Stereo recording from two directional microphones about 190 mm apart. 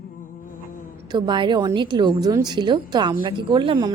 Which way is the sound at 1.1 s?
25° right (ahead or behind).